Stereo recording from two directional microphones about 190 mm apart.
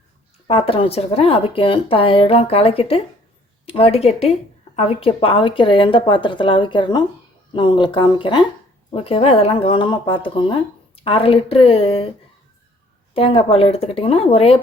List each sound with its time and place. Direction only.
0.4 s speech: 30° left (ahead or behind)
13.1 s speech: 30° left (ahead or behind)